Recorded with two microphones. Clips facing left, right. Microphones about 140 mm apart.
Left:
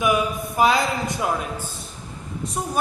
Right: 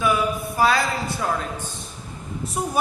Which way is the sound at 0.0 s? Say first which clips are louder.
Left 1 dB; 20° left (ahead or behind).